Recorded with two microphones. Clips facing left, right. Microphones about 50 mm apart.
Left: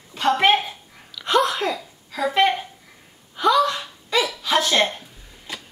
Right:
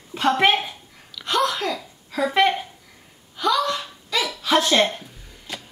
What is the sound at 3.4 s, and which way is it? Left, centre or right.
Hiccup, left.